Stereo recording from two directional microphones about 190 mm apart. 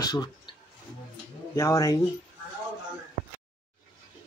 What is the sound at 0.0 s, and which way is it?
Speech, 20° left (ahead or behind).